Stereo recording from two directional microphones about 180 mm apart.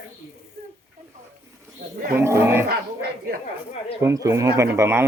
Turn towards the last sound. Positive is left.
turn(degrees=-15)  # may be behind; listen again after turning